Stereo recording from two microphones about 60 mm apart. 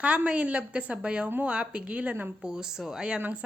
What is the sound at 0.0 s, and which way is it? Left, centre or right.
A woman's voice, right.